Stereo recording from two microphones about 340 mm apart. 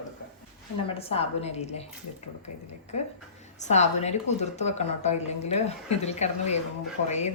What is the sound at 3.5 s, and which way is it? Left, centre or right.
Speech, centre.